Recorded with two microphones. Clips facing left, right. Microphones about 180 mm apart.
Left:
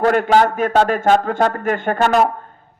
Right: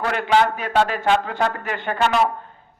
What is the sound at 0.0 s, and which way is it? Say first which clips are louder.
A man's voice: left 5 dB; 45° left (ahead or behind).